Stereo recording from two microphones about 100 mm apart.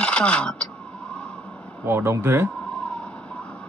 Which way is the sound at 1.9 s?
25° right (ahead or behind).